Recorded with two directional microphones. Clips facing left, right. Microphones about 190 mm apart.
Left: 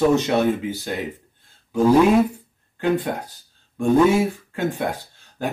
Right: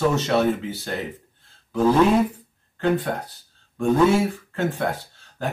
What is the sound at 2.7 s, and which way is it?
Speech, 10° left (ahead or behind).